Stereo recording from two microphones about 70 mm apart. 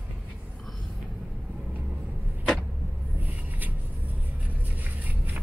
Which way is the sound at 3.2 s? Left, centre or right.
Right.